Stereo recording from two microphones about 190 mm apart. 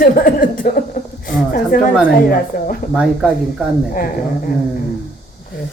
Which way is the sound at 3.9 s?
50° left (ahead or behind).